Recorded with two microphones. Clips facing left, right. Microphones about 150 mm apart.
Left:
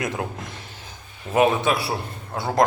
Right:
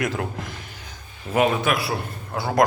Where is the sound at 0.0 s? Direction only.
20° left (ahead or behind).